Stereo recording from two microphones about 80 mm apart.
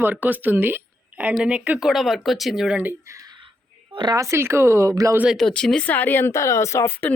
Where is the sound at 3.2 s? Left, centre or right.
Right.